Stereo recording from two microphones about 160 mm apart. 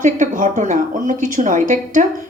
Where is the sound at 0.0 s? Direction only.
50° right (ahead or behind).